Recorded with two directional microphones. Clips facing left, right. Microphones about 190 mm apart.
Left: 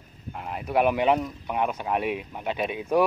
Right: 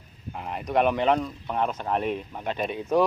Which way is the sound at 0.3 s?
Centre (ahead or behind).